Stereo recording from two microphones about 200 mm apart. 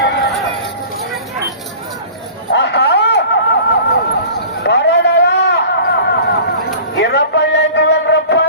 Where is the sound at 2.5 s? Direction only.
55° left (ahead or behind).